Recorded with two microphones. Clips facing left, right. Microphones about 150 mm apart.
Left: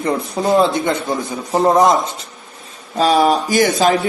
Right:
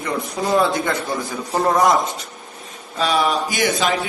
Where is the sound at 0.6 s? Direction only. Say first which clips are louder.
Left 4 dB; 20° left (ahead or behind).